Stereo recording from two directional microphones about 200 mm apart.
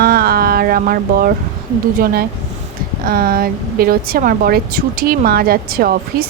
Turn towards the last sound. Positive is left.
turn(degrees=-50)  # may be behind; listen again after turning